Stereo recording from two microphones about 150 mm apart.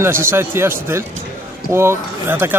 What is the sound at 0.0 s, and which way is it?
Speech, 15° right (ahead or behind).